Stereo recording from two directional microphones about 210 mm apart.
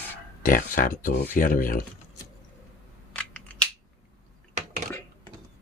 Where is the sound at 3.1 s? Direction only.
5° left (ahead or behind).